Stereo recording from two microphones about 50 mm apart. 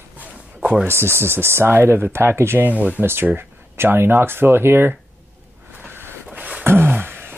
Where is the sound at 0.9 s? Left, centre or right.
Right.